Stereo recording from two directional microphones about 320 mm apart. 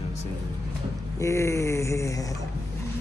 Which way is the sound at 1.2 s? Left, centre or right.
Centre.